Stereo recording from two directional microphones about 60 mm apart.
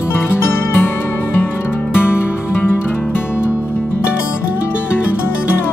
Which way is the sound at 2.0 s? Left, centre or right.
Left.